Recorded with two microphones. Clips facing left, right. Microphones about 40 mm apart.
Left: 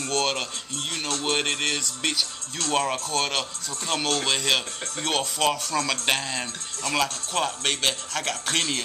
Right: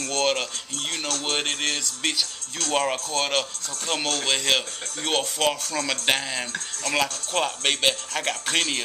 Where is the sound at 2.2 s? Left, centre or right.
Left.